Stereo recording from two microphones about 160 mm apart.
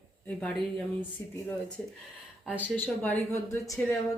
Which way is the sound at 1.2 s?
15° left (ahead or behind).